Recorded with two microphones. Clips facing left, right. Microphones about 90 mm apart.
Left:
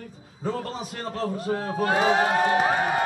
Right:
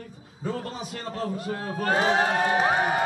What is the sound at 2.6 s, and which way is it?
Crowd, 15° right (ahead or behind).